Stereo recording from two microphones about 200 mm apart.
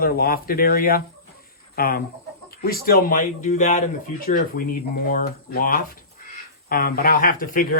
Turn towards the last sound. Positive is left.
turn(degrees=45)  # may be behind; listen again after turning